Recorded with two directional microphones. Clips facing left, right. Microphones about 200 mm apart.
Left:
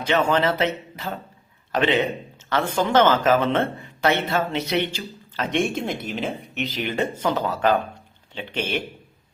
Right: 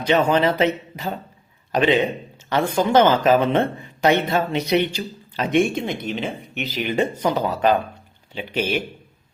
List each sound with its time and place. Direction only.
0.0 s speech: 15° right (ahead or behind)
5.6 s speech: centre (ahead or behind)
6.9 s speech: 15° right (ahead or behind)